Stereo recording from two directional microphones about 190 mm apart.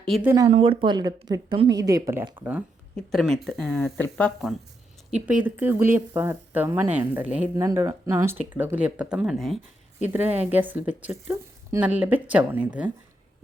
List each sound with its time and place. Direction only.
0.2 s speech: 15° right (ahead or behind)
0.5 s speech: 30° right (ahead or behind); by 4.3 s 10° left (ahead or behind)
5.1 s speech: 5° right (ahead or behind)